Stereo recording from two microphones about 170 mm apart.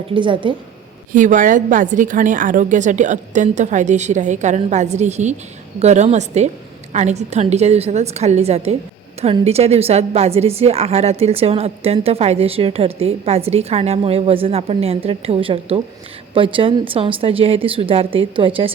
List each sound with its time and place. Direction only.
0.1 s a woman's voice: 30° right (ahead or behind)
1.1 s a woman's voice: 50° right (ahead or behind); by 18.7 s 30° right (ahead or behind)